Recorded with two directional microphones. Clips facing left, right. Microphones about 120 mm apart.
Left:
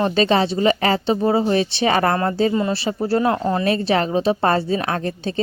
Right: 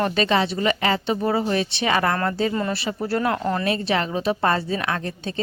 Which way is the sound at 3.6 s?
35° left (ahead or behind).